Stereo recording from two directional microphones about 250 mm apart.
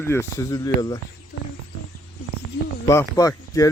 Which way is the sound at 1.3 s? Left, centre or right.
Left.